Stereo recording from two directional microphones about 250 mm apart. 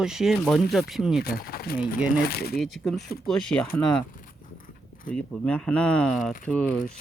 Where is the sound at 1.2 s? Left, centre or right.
Left.